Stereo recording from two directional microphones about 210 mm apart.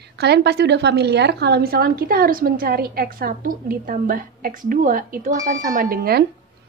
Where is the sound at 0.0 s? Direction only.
50° right (ahead or behind).